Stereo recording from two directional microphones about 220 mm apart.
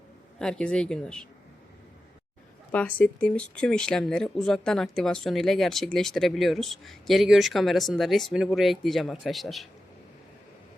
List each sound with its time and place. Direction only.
0.3 s speech: 5° left (ahead or behind)
2.7 s speech: 5° left (ahead or behind)